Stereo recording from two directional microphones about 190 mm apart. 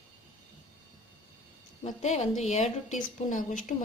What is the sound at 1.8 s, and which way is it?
A woman's voice, 35° left (ahead or behind).